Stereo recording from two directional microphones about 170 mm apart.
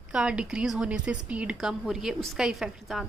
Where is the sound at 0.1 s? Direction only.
5° right (ahead or behind).